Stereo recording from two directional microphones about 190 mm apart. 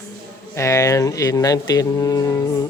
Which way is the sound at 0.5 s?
15° left (ahead or behind).